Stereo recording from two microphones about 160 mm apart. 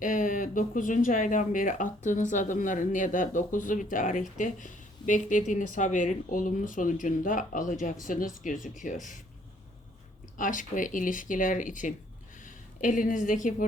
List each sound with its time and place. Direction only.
0.0 s speech: 55° left (ahead or behind)
10.3 s speech: 55° left (ahead or behind)